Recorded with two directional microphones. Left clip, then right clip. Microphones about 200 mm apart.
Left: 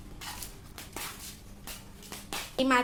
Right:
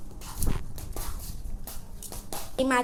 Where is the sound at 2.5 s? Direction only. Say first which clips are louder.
Right 1 dB; centre (ahead or behind).